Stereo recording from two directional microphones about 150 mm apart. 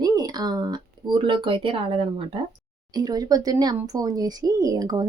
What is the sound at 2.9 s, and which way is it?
Speech, 25° right (ahead or behind).